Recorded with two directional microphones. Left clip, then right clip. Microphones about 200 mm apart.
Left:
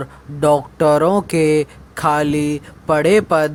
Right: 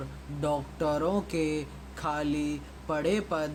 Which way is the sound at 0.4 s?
50° left (ahead or behind).